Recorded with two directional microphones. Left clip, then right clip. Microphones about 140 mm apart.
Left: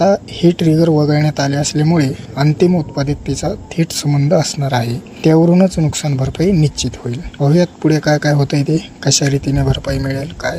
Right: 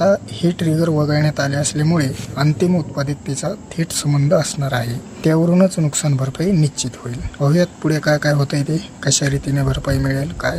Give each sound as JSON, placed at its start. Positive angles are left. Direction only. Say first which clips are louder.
{"t": 0.0, "sound": "speech", "louder": "left 3 dB", "side_deg": 25}